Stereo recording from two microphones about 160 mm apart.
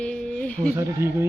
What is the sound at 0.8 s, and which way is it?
Speech, 15° right (ahead or behind).